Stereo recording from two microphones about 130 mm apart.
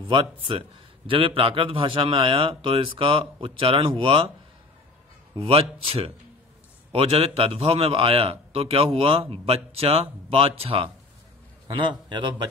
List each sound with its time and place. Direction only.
0.5 s a man's voice: 40° right (ahead or behind)
5.4 s a man's voice: 45° right (ahead or behind)